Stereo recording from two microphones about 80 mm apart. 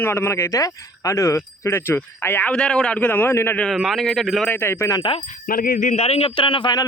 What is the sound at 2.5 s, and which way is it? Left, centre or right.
A man's voice, centre.